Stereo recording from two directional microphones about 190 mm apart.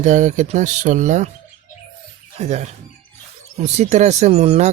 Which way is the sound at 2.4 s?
35° right (ahead or behind).